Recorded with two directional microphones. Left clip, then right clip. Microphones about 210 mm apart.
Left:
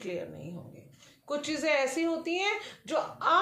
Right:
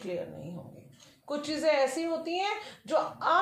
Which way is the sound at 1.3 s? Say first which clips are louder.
Right 1 dB; 25° left (ahead or behind).